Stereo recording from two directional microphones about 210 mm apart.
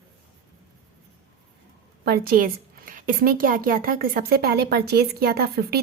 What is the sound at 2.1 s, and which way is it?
A woman's voice, 45° right (ahead or behind).